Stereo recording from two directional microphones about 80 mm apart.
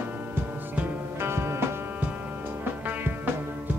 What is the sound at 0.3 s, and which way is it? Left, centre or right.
Music, right.